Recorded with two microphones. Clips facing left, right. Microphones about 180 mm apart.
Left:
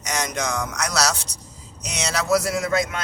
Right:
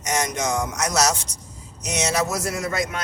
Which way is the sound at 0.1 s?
25° right (ahead or behind).